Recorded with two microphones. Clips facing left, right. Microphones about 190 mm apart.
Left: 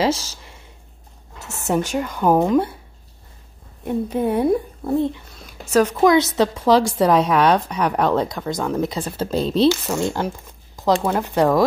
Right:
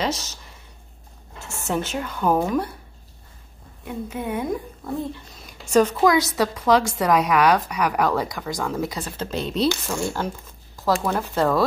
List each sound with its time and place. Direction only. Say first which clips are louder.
1.4 s a sound: left 1 dB; 20° left (ahead or behind)
2.0 s speech: left 4 dB; 10° left (ahead or behind)
3.8 s speech: left 8 dB; 35° left (ahead or behind)
5.4 s a sound: left 1 dB; 5° left (ahead or behind)
5.9 s a woman's voice: left 4 dB; 25° left (ahead or behind)
9.8 s a woman's voice: left 4 dB; 20° left (ahead or behind)